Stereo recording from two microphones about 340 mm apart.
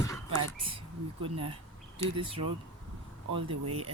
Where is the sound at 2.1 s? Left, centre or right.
Centre.